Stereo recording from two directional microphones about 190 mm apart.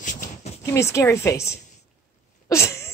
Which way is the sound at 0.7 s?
15° left (ahead or behind).